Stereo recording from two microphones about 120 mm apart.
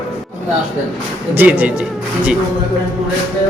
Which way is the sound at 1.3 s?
15° right (ahead or behind).